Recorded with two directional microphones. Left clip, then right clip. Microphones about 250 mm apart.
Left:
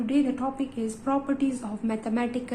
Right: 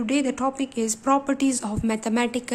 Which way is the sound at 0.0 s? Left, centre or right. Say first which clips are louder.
Right 3 dB; right.